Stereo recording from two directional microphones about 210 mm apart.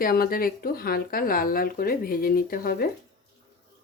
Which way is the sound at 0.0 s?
45° left (ahead or behind).